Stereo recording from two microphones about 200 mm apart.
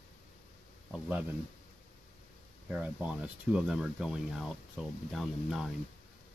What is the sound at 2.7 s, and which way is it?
Speech, 5° right (ahead or behind).